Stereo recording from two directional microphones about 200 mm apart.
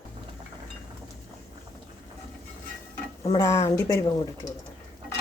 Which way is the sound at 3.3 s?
15° left (ahead or behind).